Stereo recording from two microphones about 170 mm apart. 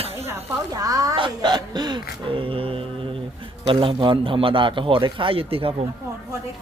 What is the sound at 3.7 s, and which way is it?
A man's voice, 30° right (ahead or behind).